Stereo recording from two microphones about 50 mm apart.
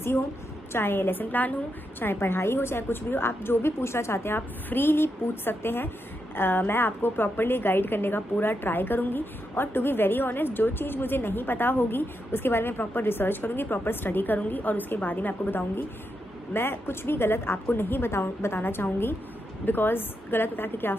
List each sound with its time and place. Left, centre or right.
0.7 s a woman's voice: left
2.0 s a woman's voice: left
4.4 s a woman's voice: left
16.5 s a woman's voice: left